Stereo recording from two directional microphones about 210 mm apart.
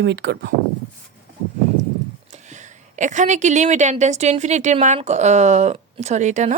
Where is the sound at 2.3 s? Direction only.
35° right (ahead or behind).